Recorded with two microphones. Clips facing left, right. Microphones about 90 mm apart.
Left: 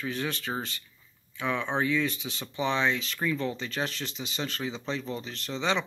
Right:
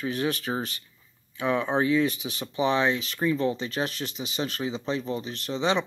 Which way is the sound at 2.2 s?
10° right (ahead or behind).